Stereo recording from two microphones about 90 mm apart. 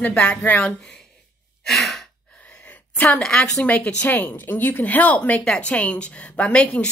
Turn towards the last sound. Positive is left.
turn(degrees=10)  # may be behind; listen again after turning